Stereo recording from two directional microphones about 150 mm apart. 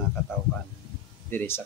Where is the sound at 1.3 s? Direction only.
15° left (ahead or behind).